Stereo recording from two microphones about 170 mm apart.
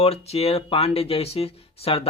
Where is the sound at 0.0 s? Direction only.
35° left (ahead or behind).